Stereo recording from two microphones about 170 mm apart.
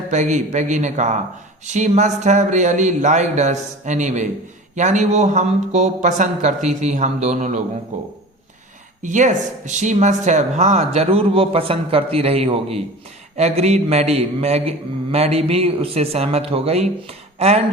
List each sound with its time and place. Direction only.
0.1 s speech: 45° right (ahead or behind)